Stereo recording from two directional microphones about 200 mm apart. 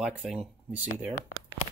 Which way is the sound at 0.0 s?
Centre (ahead or behind).